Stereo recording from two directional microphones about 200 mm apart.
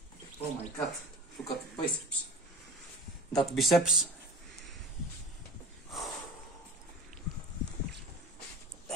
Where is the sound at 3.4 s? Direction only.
Centre (ahead or behind).